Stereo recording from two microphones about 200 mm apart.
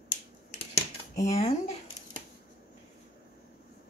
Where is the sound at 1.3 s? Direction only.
30° left (ahead or behind).